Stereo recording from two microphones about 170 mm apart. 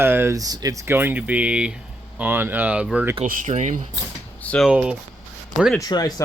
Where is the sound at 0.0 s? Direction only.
15° right (ahead or behind).